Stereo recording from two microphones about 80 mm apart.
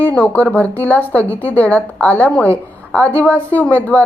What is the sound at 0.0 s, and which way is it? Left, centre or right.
A woman's voice, centre.